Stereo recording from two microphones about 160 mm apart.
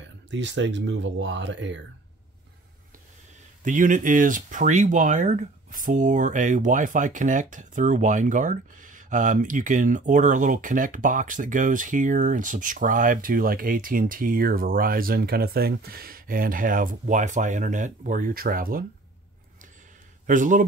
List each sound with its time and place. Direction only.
0.4 s speech: 90° right
3.6 s speech: 55° right (ahead or behind)
20.2 s speech: 55° right (ahead or behind)